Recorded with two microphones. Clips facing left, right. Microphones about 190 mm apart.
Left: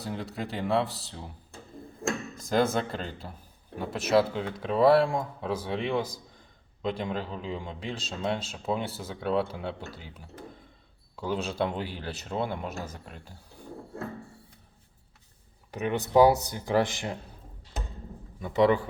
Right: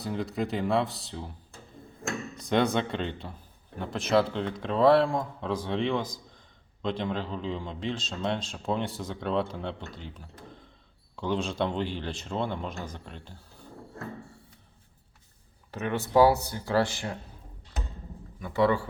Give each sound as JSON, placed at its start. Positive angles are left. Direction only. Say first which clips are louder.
{"t": 0.0, "sound": "speech", "louder": "right 4 dB", "side_deg": 0}
{"t": 2.3, "sound": "speech", "louder": "right 1 dB", "side_deg": 0}
{"t": 15.7, "sound": "speech", "louder": "left 1 dB", "side_deg": 15}
{"t": 18.3, "sound": "a man's voice", "louder": "left 2 dB", "side_deg": 20}